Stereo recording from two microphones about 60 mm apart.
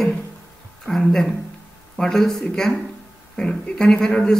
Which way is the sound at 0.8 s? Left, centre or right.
Centre.